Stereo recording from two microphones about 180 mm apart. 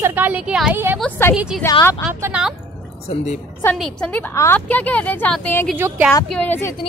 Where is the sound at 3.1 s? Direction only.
40° left (ahead or behind).